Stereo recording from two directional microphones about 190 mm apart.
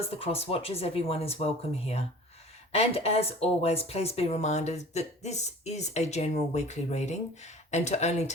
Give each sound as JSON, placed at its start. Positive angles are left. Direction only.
{"t": 0.1, "sound": "speech", "side_deg": 30}